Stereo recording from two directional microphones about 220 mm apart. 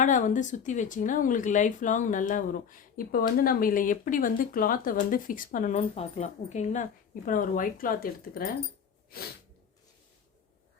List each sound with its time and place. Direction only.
0.0 s speech: 35° left (ahead or behind)